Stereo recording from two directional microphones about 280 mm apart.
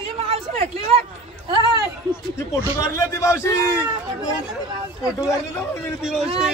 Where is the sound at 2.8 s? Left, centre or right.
Centre.